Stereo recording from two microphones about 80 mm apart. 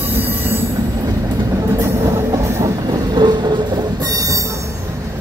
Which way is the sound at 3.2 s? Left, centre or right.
Right.